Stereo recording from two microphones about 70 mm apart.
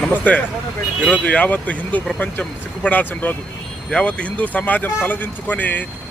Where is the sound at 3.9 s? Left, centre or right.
Centre.